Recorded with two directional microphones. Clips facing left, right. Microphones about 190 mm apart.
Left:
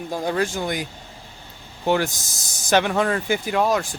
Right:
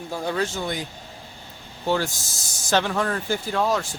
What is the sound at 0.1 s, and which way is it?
Speech, 10° left (ahead or behind).